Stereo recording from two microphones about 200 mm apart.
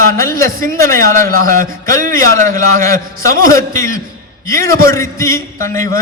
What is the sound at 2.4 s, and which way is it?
A man's voice, 15° left (ahead or behind).